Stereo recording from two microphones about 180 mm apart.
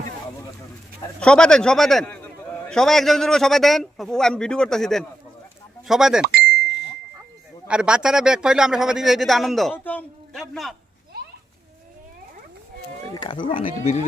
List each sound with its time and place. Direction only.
1.2 s a man's voice: 5° left (ahead or behind)
6.7 s ding: 70° left (ahead or behind)
7.7 s a man's voice: 5° right (ahead or behind)
13.1 s speech: 25° left (ahead or behind)